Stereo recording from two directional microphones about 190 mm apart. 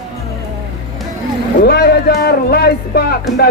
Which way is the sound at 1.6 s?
55° left (ahead or behind).